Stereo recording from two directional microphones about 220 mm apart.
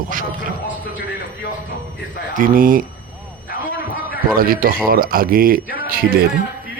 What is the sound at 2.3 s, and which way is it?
Speech, 40° right (ahead or behind).